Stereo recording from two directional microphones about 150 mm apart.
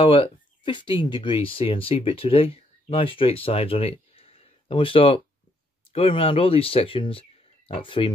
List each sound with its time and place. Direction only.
0.0 s speech: 35° left (ahead or behind)